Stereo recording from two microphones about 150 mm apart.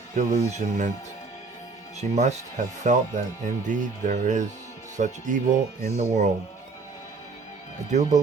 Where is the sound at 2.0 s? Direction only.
50° right (ahead or behind).